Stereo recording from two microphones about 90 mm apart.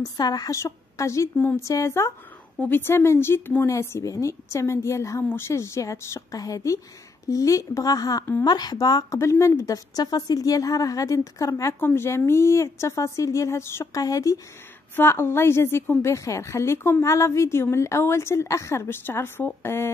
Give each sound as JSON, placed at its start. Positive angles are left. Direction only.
{"t": 0.0, "sound": "speech", "side_deg": 45}
{"t": 0.6, "sound": "a woman's voice", "side_deg": 35}
{"t": 9.2, "sound": "a woman's voice", "side_deg": 30}
{"t": 9.9, "sound": "a woman's voice", "side_deg": 45}
{"t": 11.8, "sound": "a woman's voice", "side_deg": 25}
{"t": 15.0, "sound": "a woman's voice", "side_deg": 25}